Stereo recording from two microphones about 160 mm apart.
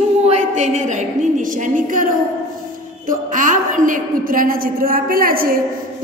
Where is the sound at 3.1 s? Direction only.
55° right (ahead or behind).